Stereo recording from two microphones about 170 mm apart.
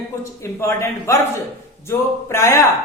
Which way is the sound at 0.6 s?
15° left (ahead or behind).